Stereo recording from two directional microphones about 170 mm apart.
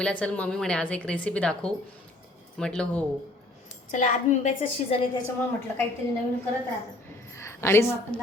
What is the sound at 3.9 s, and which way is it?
A woman's voice, 45° left (ahead or behind).